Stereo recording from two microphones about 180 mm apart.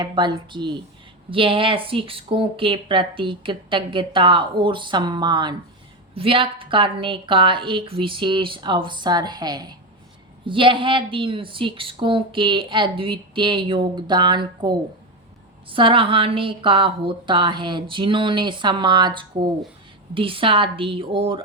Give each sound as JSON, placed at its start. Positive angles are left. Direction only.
{"t": 0.0, "sound": "a woman's voice", "side_deg": -25}